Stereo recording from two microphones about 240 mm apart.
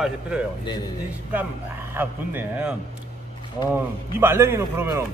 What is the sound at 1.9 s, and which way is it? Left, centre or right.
A man's voice, centre.